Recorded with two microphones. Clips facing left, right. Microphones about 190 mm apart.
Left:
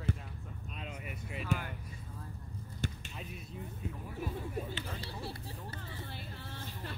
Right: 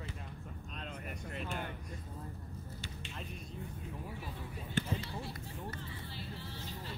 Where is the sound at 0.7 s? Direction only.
5° left (ahead or behind).